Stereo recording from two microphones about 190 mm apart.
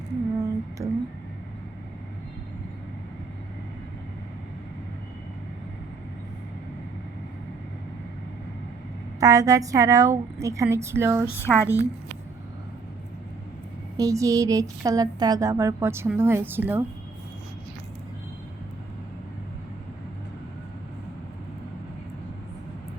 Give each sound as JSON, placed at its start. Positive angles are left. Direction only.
{"t": 0.3, "sound": "a sound", "side_deg": -15}
{"t": 9.2, "sound": "speech", "side_deg": -15}
{"t": 11.3, "sound": "speech", "side_deg": 15}
{"t": 13.9, "sound": "speech", "side_deg": -15}